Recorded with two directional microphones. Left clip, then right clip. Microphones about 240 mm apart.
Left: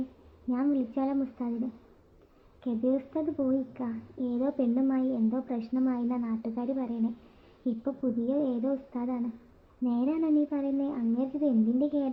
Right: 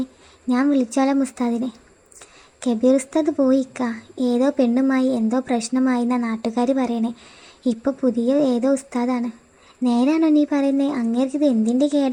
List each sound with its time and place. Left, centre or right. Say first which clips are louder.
0.5 s a woman's voice: right 10 dB; right